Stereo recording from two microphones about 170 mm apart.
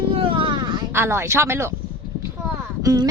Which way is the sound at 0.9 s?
15° right (ahead or behind).